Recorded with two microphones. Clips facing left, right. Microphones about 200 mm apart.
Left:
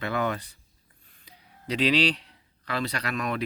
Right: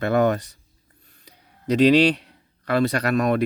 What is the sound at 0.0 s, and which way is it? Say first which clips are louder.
Speech: right 9 dB; 45° right (ahead or behind).